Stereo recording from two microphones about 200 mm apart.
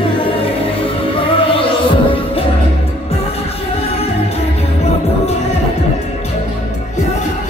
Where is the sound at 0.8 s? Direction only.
25° left (ahead or behind).